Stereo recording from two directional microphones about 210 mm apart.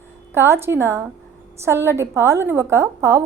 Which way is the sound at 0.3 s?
10° right (ahead or behind).